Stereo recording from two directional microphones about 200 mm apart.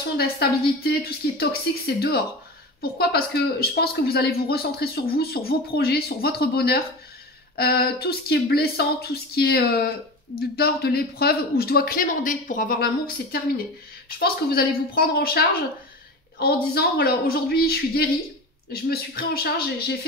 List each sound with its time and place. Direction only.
0.2 s speech: 50° left (ahead or behind)